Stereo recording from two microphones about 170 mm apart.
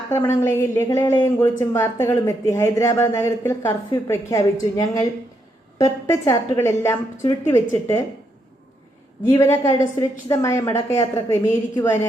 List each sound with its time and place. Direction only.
0.1 s a woman's voice: 15° left (ahead or behind)
9.4 s a woman's voice: 20° left (ahead or behind)